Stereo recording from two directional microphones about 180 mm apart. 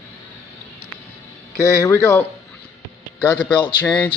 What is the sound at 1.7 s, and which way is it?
Speech, 15° left (ahead or behind).